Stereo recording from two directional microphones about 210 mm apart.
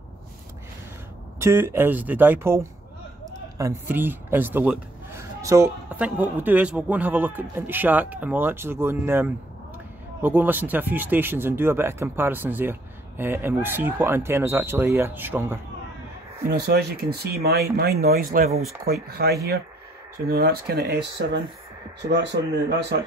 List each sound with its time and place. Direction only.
1.4 s speech: 10° right (ahead or behind)
16.4 s speech: 45° right (ahead or behind)